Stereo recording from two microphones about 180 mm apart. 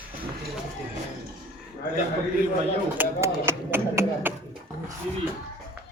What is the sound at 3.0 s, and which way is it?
Speech, 15° right (ahead or behind).